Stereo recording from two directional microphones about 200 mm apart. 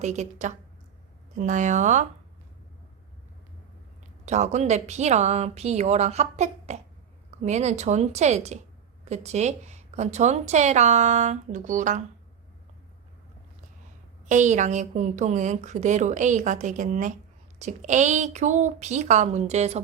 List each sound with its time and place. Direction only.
0.0 s a woman's voice: 35° right (ahead or behind)
4.3 s a woman's voice: 35° right (ahead or behind)
14.3 s a woman's voice: 35° right (ahead or behind)